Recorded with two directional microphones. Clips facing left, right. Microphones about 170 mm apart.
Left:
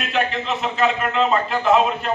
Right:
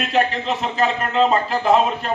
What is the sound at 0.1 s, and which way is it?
A man's voice, 35° right (ahead or behind).